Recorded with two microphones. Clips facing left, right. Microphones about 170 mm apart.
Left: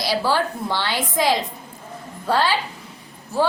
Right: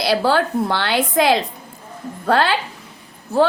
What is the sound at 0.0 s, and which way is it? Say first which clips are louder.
A woman's voice: right 4 dB; 60° right (ahead or behind).